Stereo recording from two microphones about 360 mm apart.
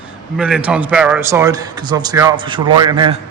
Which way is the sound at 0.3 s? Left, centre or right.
Centre.